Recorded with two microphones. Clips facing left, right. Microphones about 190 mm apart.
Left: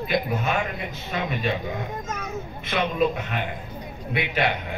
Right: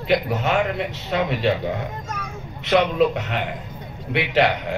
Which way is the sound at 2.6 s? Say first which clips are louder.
Right 6 dB; 75° right (ahead or behind).